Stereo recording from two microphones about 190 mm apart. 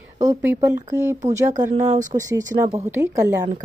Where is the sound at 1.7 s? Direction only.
40° right (ahead or behind).